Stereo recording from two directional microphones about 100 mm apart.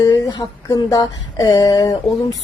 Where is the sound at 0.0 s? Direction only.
35° left (ahead or behind).